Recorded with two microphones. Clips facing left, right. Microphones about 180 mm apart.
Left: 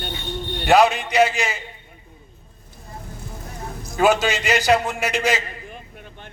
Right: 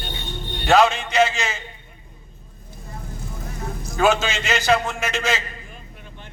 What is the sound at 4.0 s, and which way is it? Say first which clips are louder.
A man's voice: left 2 dB; 15° left (ahead or behind).